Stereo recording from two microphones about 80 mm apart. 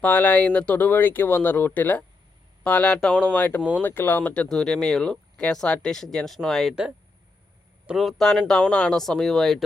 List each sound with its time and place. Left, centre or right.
0.0 s speech: centre
4.4 s speech: centre
7.9 s speech: centre